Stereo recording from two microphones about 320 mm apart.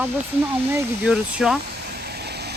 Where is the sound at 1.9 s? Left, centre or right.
Right.